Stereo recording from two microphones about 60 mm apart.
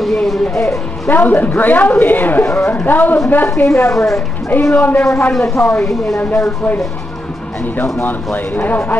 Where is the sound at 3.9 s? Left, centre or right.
Left.